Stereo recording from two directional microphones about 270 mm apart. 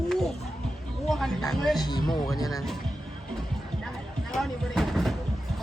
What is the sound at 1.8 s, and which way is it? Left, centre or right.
Speech, centre.